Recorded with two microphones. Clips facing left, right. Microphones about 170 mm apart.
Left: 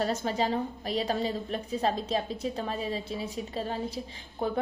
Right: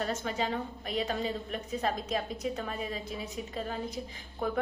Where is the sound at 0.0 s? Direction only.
35° left (ahead or behind).